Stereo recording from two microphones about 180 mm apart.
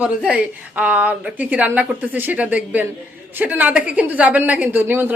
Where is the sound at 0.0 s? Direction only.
5° right (ahead or behind).